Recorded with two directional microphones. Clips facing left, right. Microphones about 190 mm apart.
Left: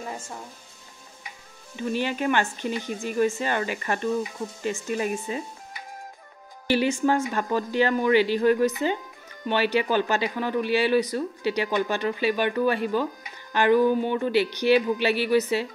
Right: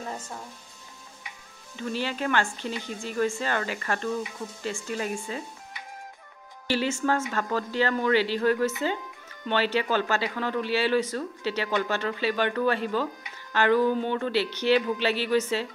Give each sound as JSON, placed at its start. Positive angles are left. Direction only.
{"t": 1.8, "sound": "speech", "side_deg": 15}
{"t": 6.7, "sound": "speech", "side_deg": 15}